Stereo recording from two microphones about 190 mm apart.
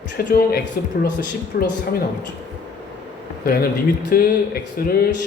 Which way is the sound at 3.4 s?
55° left (ahead or behind).